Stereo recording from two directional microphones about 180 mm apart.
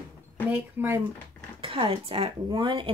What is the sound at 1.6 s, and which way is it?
Speech, 30° right (ahead or behind).